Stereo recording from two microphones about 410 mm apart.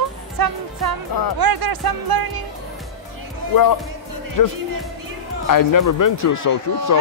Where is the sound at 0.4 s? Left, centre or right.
Right.